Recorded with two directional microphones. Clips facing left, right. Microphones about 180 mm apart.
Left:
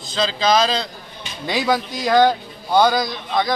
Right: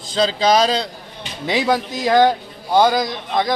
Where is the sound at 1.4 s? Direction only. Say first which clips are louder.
Right 2 dB; 20° right (ahead or behind).